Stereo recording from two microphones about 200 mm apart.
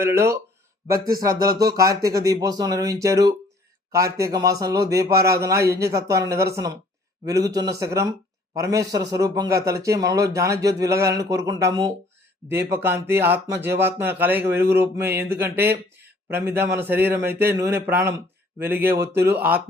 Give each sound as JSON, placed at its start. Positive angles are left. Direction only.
{"t": 0.0, "sound": "speech", "side_deg": -10}
{"t": 9.6, "sound": "speech", "side_deg": -50}
{"t": 9.8, "sound": "speech", "side_deg": -15}
{"t": 19.1, "sound": "speech", "side_deg": -55}